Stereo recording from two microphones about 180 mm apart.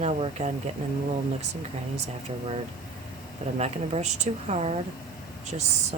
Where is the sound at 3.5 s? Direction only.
40° right (ahead or behind).